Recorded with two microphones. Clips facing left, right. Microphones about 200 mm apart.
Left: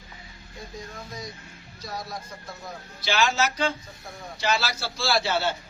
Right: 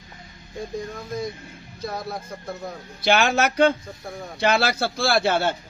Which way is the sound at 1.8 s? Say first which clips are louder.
Right 5 dB; 55° right (ahead or behind).